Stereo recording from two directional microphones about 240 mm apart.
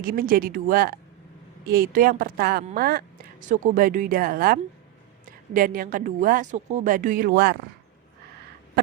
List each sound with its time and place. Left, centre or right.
0.0 s speech: right